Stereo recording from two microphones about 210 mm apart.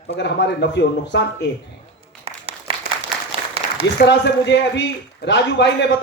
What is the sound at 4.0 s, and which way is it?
A man's voice, 55° left (ahead or behind).